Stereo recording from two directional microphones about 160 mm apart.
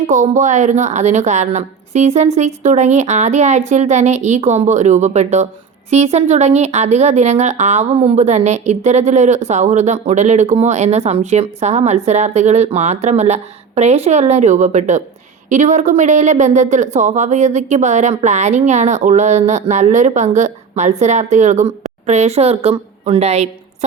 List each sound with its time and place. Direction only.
0.1 s a woman's voice: 50° right (ahead or behind)